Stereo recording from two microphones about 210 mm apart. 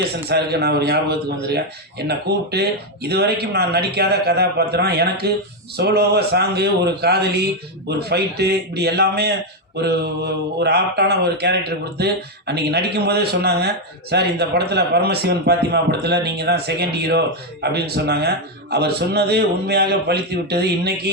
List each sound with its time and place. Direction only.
0.3 s a man's voice: 50° right (ahead or behind)